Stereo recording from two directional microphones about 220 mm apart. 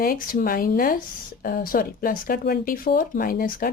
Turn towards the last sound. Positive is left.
turn(degrees=40)  # may be behind; listen again after turning